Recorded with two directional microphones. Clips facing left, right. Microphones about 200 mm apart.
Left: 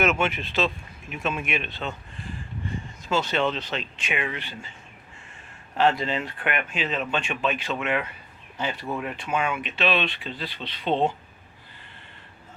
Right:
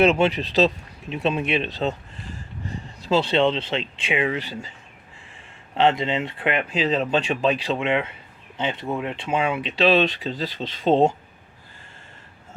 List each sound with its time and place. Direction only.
0.0 s speech: 35° right (ahead or behind)
5.7 s speech: 20° right (ahead or behind); by 11.1 s 40° right (ahead or behind)